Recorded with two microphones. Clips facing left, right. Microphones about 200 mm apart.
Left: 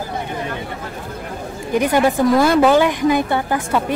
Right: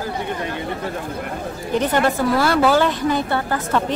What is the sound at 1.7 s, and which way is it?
A woman's voice, 10° left (ahead or behind).